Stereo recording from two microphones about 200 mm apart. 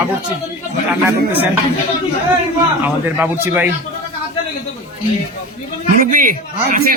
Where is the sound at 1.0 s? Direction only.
10° right (ahead or behind).